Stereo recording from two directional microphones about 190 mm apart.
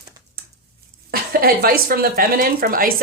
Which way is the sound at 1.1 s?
50° right (ahead or behind).